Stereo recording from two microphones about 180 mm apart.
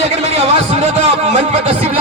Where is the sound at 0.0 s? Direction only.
40° right (ahead or behind).